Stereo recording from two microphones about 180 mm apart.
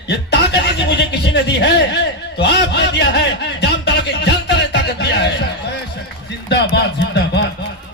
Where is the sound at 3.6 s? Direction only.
65° left (ahead or behind).